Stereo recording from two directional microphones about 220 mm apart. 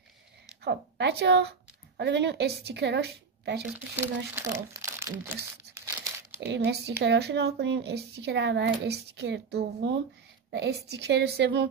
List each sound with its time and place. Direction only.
0.6 s speech: 50° right (ahead or behind)
3.6 s speech: 10° right (ahead or behind)
6.4 s a woman's voice: 50° right (ahead or behind)